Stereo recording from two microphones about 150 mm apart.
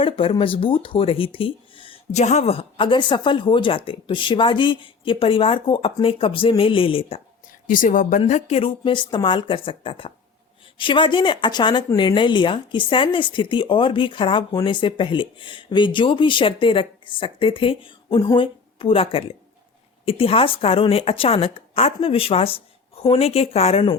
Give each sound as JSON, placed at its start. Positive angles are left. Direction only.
{"t": 0.0, "sound": "speech", "side_deg": 40}
{"t": 2.2, "sound": "speech", "side_deg": 45}
{"t": 7.7, "sound": "speech", "side_deg": 65}
{"t": 8.3, "sound": "speech", "side_deg": 45}